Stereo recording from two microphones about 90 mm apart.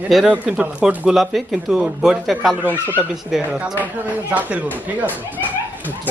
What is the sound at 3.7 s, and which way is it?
Speech, 20° right (ahead or behind).